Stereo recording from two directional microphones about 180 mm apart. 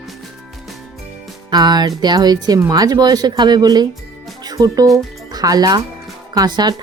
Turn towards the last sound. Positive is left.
turn(degrees=-25)  # may be behind; listen again after turning